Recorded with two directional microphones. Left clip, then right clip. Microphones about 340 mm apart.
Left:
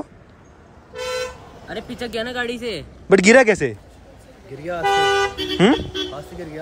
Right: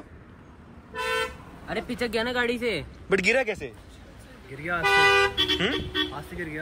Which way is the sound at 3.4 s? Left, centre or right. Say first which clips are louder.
Left 13 dB; left.